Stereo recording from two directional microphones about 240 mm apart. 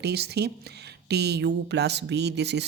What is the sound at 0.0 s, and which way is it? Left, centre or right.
Speech, right.